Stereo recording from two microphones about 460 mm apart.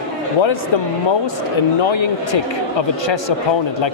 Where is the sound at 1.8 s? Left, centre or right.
Left.